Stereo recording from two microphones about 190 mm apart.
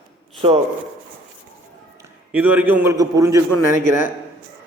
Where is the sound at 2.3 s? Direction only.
10° right (ahead or behind).